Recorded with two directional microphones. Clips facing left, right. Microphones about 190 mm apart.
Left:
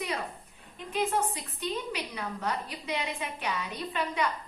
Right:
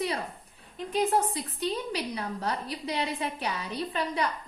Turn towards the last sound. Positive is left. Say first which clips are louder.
# right 2 dB
turn(degrees=-35)  # may be behind; listen again after turning